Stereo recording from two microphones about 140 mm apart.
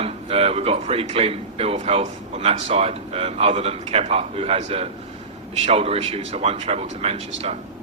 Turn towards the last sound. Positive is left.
turn(degrees=-45)  # may be behind; listen again after turning